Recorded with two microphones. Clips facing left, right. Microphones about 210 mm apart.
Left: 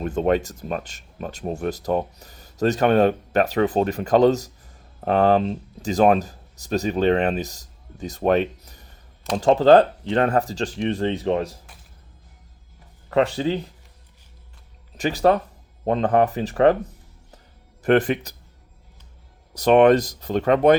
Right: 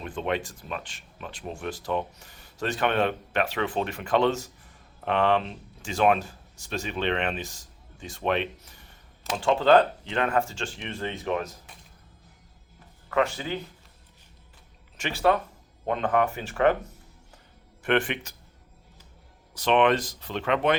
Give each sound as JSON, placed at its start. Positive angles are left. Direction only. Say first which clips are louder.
{"t": 0.0, "sound": "speech", "louder": "left 9 dB", "side_deg": 45}
{"t": 13.1, "sound": "speech", "louder": "left 6 dB", "side_deg": 35}
{"t": 14.9, "sound": "speech", "louder": "left 5 dB", "side_deg": 35}
{"t": 17.8, "sound": "speech", "louder": "left 7 dB", "side_deg": 40}
{"t": 19.5, "sound": "speech", "louder": "left 7 dB", "side_deg": 40}